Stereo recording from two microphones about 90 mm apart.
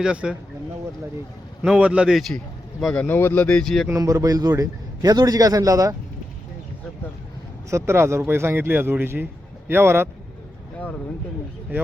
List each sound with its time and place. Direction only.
0.0 s speech: 10° right (ahead or behind)
1.6 s a man's voice: 10° right (ahead or behind)
3.0 s speech: 25° left (ahead or behind); by 3.8 s 5° left (ahead or behind)
3.9 s a man's voice: 40° right (ahead or behind)
7.7 s a man's voice: 30° right (ahead or behind)